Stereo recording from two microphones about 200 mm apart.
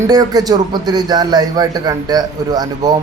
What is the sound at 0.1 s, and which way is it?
A man's voice, 20° right (ahead or behind).